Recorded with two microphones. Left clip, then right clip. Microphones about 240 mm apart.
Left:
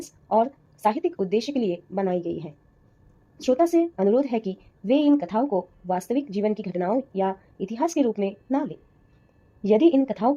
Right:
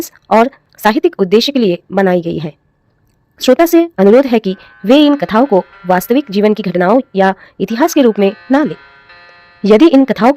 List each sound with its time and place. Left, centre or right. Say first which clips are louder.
0.0 s speech: right 12 dB; right